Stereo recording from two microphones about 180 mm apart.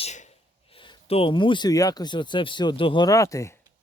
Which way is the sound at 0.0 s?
40° left (ahead or behind).